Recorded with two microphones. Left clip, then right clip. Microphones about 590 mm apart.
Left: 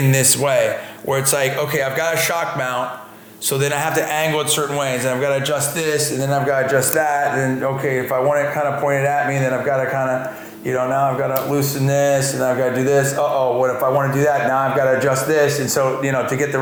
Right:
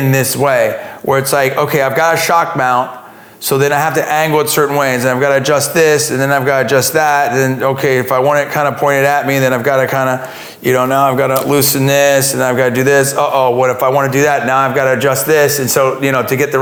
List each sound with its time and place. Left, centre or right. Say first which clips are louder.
0.1 s a man's voice: right 5 dB; centre; by 16.6 s right